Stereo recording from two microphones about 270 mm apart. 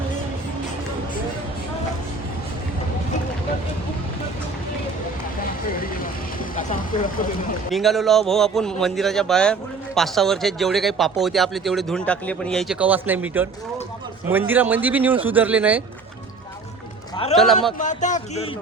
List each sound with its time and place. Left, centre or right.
5.4 s vehicle: left
7.7 s a man's voice: centre
17.3 s a man's voice: centre
17.7 s speech: left